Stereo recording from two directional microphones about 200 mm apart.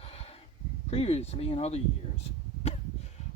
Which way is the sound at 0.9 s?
30° left (ahead or behind).